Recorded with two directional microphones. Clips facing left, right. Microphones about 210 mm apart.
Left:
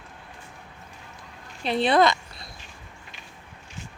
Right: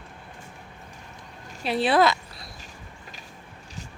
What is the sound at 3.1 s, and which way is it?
Vehicle, 40° right (ahead or behind).